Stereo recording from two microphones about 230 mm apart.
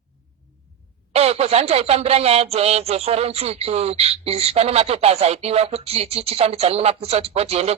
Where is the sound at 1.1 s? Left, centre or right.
Right.